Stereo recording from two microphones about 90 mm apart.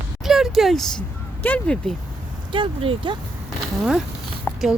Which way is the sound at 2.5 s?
80° right.